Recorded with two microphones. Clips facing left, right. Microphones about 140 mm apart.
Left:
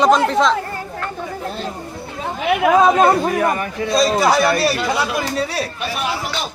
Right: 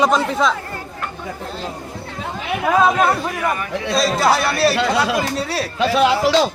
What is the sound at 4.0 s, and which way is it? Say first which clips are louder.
Speech: left 2 dB; centre (ahead or behind).